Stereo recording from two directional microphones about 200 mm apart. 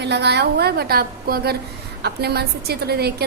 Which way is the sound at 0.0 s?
60° right (ahead or behind).